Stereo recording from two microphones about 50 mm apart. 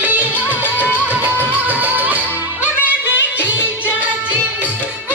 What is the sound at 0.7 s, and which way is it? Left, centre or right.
Music, left.